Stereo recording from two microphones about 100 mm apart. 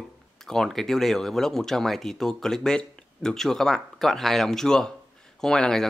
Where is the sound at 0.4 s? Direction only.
5° left (ahead or behind).